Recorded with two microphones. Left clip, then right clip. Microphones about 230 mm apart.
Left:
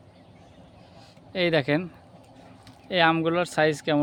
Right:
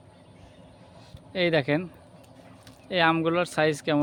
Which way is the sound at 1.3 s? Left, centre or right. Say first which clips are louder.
Left 1 dB; centre.